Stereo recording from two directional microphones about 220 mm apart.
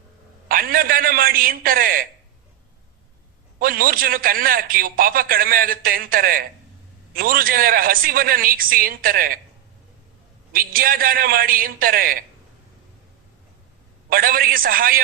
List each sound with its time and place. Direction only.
0.4 s a man's voice: 40° right (ahead or behind)
3.6 s a man's voice: 40° right (ahead or behind)
10.5 s a man's voice: 40° right (ahead or behind)
14.1 s a man's voice: 40° right (ahead or behind)